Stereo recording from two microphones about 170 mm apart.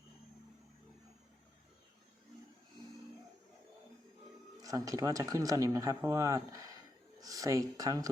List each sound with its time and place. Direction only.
4.6 s speech: 20° right (ahead or behind)